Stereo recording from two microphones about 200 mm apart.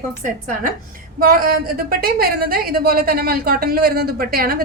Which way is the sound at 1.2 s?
45° right (ahead or behind).